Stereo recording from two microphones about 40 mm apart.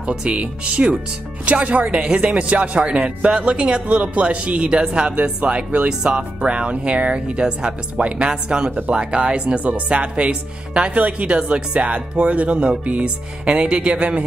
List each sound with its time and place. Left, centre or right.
0.1 s speech: right